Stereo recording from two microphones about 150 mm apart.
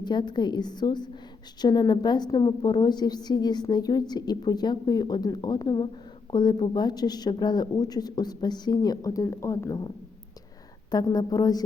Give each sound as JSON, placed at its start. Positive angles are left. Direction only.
{"t": 0.0, "sound": "a woman's voice", "side_deg": 30}
{"t": 10.9, "sound": "a woman's voice", "side_deg": 25}